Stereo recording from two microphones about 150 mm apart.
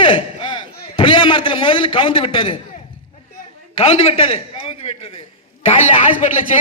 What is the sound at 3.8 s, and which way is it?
A man's voice, 45° left (ahead or behind).